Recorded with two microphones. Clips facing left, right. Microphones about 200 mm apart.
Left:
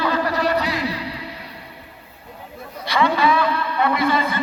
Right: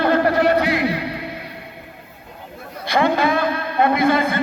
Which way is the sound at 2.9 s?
50° right (ahead or behind).